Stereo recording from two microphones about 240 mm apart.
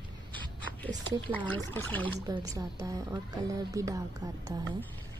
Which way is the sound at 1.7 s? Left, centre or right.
Centre.